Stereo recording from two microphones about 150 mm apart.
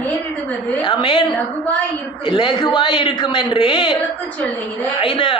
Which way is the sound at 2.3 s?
35° left (ahead or behind).